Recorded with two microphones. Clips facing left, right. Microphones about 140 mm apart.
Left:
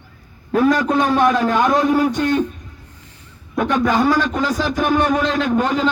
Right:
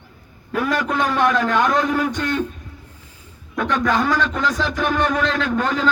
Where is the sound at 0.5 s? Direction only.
35° left (ahead or behind).